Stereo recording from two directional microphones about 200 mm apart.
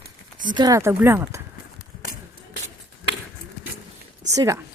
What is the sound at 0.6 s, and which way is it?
Speech, 15° right (ahead or behind).